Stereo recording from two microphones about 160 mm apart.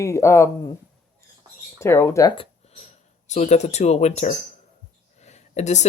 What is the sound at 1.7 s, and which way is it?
Speech, 15° left (ahead or behind).